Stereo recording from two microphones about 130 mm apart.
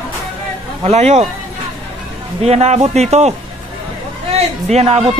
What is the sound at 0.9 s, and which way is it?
Speech, 55° right (ahead or behind).